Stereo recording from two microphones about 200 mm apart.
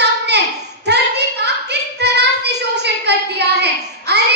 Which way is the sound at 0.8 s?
55° right (ahead or behind).